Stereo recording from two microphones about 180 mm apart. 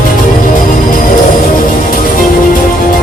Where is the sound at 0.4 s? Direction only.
45° left (ahead or behind).